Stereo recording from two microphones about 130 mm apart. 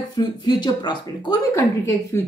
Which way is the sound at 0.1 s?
35° left (ahead or behind).